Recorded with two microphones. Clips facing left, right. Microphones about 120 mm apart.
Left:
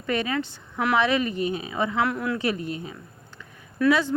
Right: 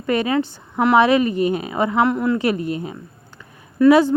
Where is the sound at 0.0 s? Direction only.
40° right (ahead or behind).